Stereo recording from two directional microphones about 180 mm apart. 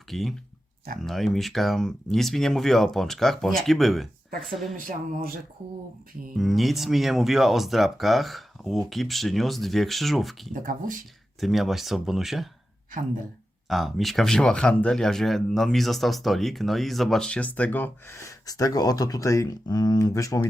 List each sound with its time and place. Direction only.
0.1 s speech: centre (ahead or behind)
4.8 s speech: 50° right (ahead or behind)
6.3 s speech: centre (ahead or behind)
10.5 s speech: 50° right (ahead or behind)
11.3 s speech: centre (ahead or behind)
13.7 s speech: centre (ahead or behind); by 20.5 s 20° left (ahead or behind)